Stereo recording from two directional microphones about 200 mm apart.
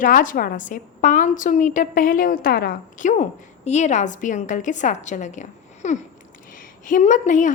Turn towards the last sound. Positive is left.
turn(degrees=40)  # may be behind; listen again after turning